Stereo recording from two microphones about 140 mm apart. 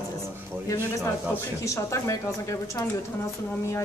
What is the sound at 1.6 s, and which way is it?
Speech, 20° left (ahead or behind).